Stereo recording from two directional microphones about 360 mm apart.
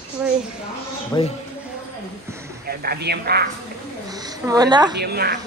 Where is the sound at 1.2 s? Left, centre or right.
Centre.